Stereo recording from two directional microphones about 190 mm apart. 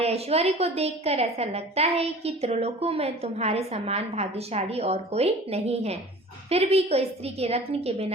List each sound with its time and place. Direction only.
0.0 s a woman's voice: 35° right (ahead or behind)